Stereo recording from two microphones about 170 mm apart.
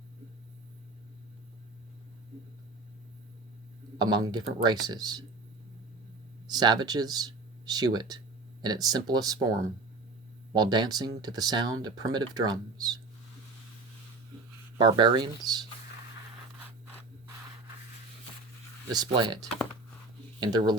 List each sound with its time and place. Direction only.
3.9 s speech: 25° right (ahead or behind)
6.5 s speech: 25° right (ahead or behind)
10.5 s speech: 25° right (ahead or behind)
14.8 s speech: 25° right (ahead or behind)
18.9 s speech: 25° right (ahead or behind)